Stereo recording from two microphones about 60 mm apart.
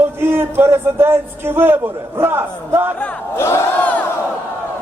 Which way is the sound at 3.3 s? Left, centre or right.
Left.